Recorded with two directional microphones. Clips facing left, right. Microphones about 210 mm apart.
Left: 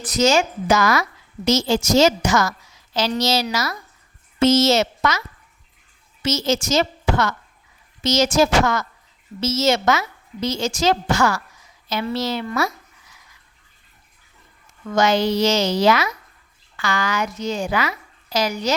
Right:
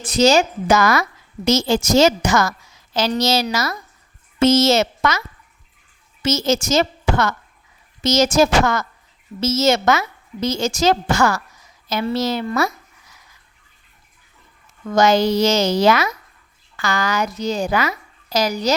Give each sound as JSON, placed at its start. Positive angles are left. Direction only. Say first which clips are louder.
{"t": 0.0, "sound": "a woman's voice", "louder": "right 3 dB", "side_deg": -30}
{"t": 0.7, "sound": "a woman's voice", "louder": "right 2 dB", "side_deg": -55}
{"t": 6.2, "sound": "a woman's voice", "louder": "right 2 dB", "side_deg": -45}
{"t": 14.9, "sound": "a woman's voice", "louder": "right 3 dB", "side_deg": -40}